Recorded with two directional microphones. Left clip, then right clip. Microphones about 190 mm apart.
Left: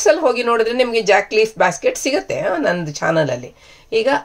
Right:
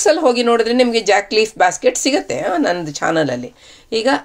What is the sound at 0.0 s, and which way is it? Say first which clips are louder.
Speech: right 1 dB; 35° right (ahead or behind).